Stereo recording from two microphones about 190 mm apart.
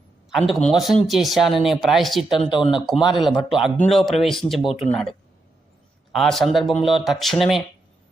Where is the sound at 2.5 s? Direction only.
25° left (ahead or behind).